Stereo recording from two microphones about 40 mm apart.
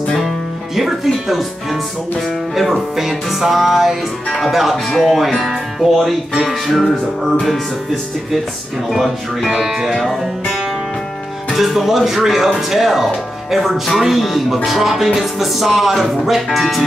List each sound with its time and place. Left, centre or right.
0.7 s speech: centre
8.9 s speech: centre
9.9 s speech: centre